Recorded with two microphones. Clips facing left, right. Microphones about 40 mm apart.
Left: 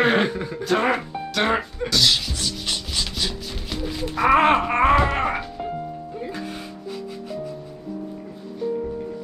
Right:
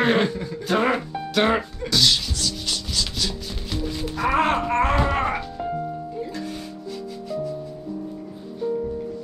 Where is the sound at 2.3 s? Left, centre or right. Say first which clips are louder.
Even; left.